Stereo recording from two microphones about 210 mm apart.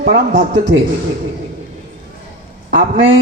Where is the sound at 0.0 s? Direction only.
50° right (ahead or behind).